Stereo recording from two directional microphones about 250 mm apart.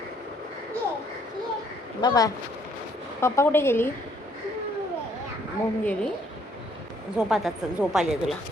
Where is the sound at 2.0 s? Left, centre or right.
Centre.